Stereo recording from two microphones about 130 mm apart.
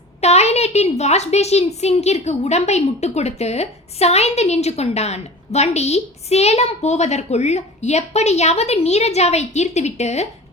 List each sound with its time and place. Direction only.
0.2 s a woman's voice: 55° left (ahead or behind)